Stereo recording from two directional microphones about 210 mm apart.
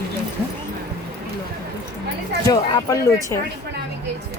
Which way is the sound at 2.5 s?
20° left (ahead or behind).